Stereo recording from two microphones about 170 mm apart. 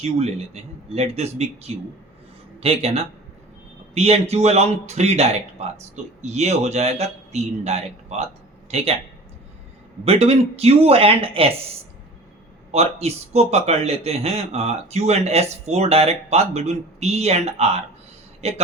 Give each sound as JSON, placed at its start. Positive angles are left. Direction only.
{"t": 0.0, "sound": "a man's voice", "side_deg": -40}
{"t": 10.0, "sound": "a man's voice", "side_deg": -35}
{"t": 12.7, "sound": "a man's voice", "side_deg": -40}